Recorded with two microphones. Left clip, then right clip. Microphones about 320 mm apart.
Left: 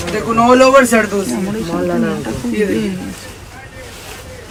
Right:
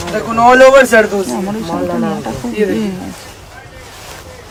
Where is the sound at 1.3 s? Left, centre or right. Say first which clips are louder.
Right 1 dB; right.